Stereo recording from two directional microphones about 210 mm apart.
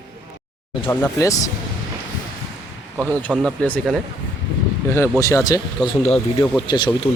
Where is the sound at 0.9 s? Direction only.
15° left (ahead or behind).